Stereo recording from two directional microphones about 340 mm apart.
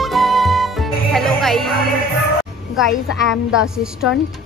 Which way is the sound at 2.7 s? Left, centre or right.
Centre.